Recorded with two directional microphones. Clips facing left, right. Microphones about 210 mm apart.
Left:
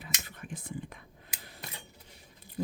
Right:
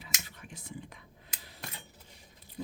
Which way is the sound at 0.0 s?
55° left (ahead or behind).